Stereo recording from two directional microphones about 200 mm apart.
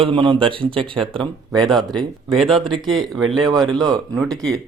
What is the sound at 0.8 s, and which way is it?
Speech, 5° left (ahead or behind).